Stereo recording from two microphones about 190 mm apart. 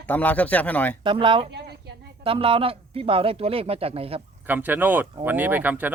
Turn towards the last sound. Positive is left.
turn(degrees=-10)  # may be behind; listen again after turning